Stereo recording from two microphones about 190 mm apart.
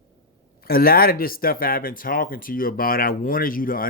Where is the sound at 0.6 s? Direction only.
50° left (ahead or behind).